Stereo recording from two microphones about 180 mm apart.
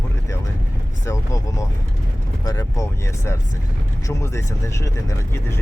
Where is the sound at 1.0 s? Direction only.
20° left (ahead or behind).